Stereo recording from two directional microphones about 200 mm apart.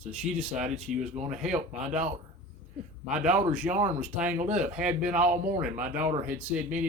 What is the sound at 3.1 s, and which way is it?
Speech, 5° right (ahead or behind).